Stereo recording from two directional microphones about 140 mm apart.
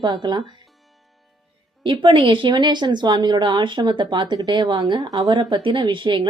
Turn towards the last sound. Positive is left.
turn(degrees=-35)  # may be behind; listen again after turning